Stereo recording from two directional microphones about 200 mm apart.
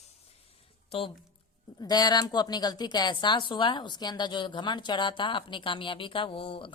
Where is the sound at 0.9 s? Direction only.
30° left (ahead or behind).